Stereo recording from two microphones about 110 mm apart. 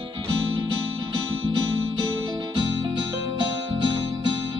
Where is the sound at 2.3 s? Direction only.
45° right (ahead or behind).